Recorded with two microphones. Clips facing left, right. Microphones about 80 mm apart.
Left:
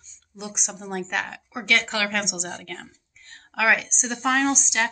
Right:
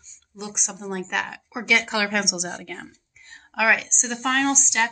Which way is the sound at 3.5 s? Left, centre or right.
Centre.